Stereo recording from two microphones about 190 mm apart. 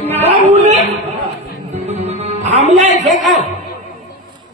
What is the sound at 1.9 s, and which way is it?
Music, 35° right (ahead or behind).